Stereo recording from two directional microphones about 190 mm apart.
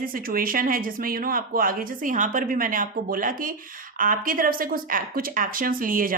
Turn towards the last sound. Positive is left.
turn(degrees=-45)  # may be behind; listen again after turning